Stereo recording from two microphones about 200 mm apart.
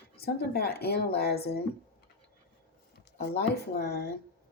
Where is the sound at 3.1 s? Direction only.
55° left (ahead or behind).